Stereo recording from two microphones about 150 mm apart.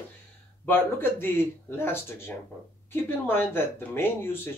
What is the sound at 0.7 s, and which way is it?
Speech, 15° left (ahead or behind).